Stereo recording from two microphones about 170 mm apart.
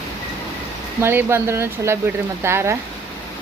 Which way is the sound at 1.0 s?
15° right (ahead or behind).